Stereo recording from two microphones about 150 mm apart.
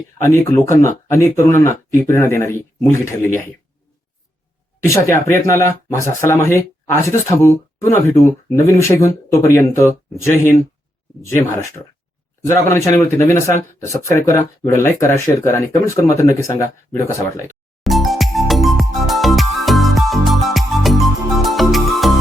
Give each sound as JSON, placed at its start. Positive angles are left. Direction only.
{"t": 0.3, "sound": "speech", "side_deg": 20}
{"t": 4.9, "sound": "speech", "side_deg": 15}
{"t": 17.8, "sound": "music", "side_deg": 0}